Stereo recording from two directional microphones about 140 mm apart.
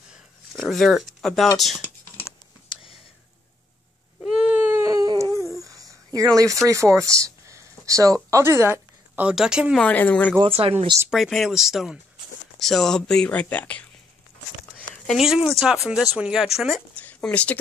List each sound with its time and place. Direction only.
0.6 s speech: centre (ahead or behind)
4.2 s baby cry: 5° right (ahead or behind); by 5.3 s 25° right (ahead or behind)
5.6 s a sound: 25° right (ahead or behind)
9.3 s speech: 5° right (ahead or behind)
9.8 s speech: 10° left (ahead or behind)
10.4 s speech: 40° right (ahead or behind)
11.1 s speech: centre (ahead or behind)
15.0 s speech: 5° right (ahead or behind)
16.9 s speech: 10° left (ahead or behind)